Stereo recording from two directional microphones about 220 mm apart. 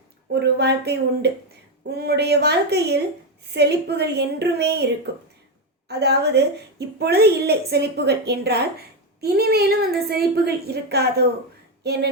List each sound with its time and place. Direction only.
0.3 s a woman's voice: 50° right (ahead or behind)
5.9 s a woman's voice: 50° right (ahead or behind)